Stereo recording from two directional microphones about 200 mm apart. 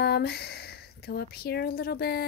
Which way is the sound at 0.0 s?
55° left (ahead or behind).